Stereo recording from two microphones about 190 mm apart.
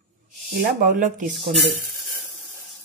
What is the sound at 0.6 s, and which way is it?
Speech, 45° right (ahead or behind).